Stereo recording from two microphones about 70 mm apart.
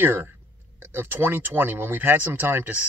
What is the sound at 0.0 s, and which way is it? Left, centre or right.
Speech, right.